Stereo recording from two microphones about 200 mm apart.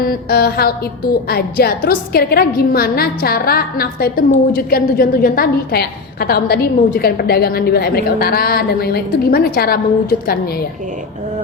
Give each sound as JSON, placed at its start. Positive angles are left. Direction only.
{"t": 0.0, "sound": "a woman's voice", "side_deg": 50}